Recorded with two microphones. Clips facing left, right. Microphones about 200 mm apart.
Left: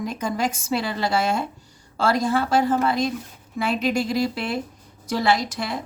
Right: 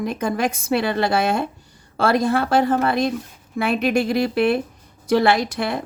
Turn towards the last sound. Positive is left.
turn(degrees=-60)  # may be behind; listen again after turning